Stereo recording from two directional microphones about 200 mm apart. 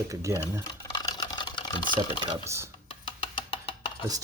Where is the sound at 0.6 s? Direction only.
20° left (ahead or behind).